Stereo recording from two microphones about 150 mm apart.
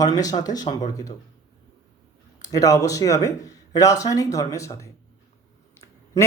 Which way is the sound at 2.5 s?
20° left (ahead or behind).